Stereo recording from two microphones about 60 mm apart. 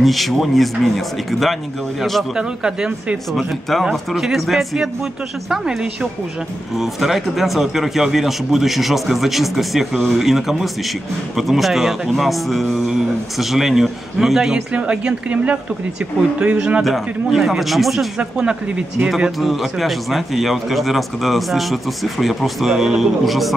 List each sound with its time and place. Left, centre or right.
0.0 s speech: centre
2.3 s speech: centre
14.7 s speech: centre
16.8 s speech: centre